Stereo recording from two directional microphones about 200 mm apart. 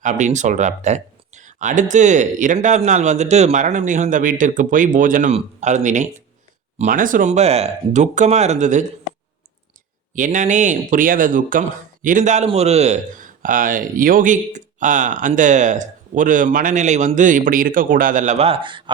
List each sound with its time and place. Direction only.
0.0 s a man's voice: 40° right (ahead or behind)
10.2 s a man's voice: 40° right (ahead or behind)